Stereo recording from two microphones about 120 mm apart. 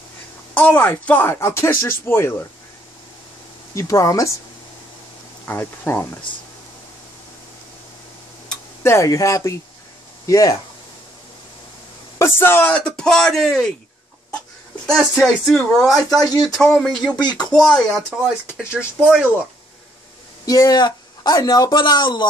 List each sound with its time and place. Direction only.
0.6 s speech: 15° left (ahead or behind)
3.7 s speech: 25° left (ahead or behind)
5.4 s speech: 20° left (ahead or behind)
8.8 s speech: 25° left (ahead or behind)
12.2 s speech: 20° left (ahead or behind)
12.7 s speech: 5° left (ahead or behind)
14.9 s speech: 5° left (ahead or behind)
16.2 s speech: 30° left (ahead or behind)
16.4 s speech: 5° left (ahead or behind)
17.2 s speech: 35° left (ahead or behind)
17.6 s speech: 5° left (ahead or behind)
20.4 s speech: 30° left (ahead or behind)